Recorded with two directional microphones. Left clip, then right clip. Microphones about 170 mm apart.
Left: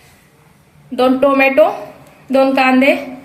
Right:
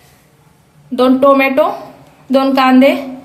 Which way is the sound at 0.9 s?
70° right (ahead or behind).